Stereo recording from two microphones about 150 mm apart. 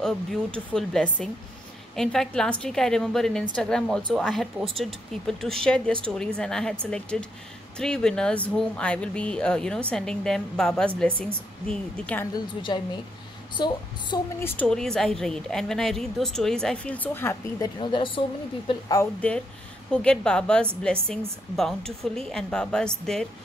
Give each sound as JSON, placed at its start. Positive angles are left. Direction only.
{"t": 0.0, "sound": "a woman's voice", "side_deg": 5}
{"t": 13.6, "sound": "a woman's voice", "side_deg": 30}
{"t": 14.4, "sound": "a woman's voice", "side_deg": 15}
{"t": 14.7, "sound": "speech", "side_deg": 5}
{"t": 17.7, "sound": "a woman's voice", "side_deg": 35}
{"t": 19.9, "sound": "a woman's voice", "side_deg": 5}